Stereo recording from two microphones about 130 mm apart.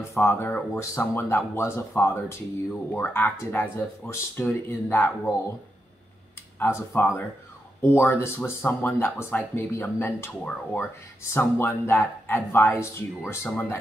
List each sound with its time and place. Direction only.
0.0 s speech: 20° left (ahead or behind)
6.6 s speech: 20° left (ahead or behind)